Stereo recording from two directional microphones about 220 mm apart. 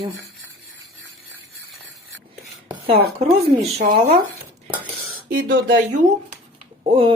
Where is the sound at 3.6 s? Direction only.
35° right (ahead or behind).